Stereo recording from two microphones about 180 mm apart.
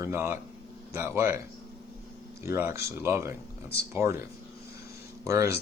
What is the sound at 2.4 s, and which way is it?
Speech, 15° right (ahead or behind).